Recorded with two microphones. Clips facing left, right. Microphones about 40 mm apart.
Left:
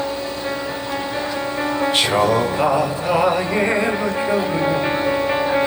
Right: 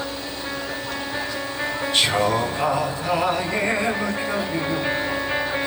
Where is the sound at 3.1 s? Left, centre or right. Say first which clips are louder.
Left 5 dB; left.